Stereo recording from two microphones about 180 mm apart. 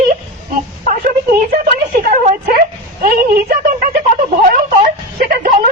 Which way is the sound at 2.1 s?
50° right (ahead or behind).